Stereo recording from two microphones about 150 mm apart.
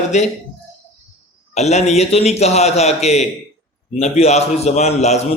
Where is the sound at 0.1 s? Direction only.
50° left (ahead or behind).